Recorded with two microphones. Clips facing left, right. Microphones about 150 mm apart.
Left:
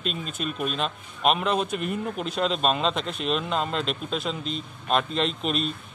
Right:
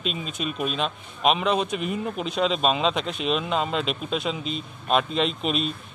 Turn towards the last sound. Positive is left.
turn(degrees=0)  # may be behind; listen again after turning